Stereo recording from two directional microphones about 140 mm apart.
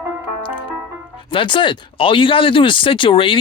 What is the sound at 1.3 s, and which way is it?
Speech, 35° left (ahead or behind).